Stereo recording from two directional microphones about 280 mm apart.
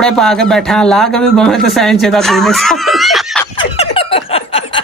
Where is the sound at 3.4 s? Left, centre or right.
Centre.